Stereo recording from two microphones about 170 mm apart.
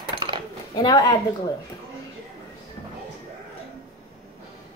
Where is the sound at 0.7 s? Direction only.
25° left (ahead or behind).